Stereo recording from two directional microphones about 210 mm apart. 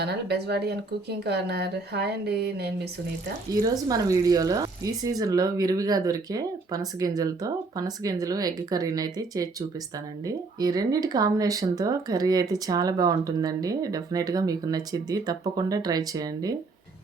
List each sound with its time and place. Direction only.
0.0 s speech: 50° right (ahead or behind)
3.5 s speech: 15° right (ahead or behind)